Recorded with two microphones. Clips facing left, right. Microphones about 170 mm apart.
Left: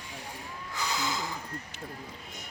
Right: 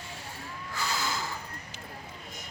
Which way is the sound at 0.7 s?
20° left (ahead or behind).